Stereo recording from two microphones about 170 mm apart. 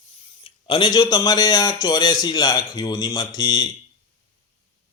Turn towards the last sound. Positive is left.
turn(degrees=25)  # may be behind; listen again after turning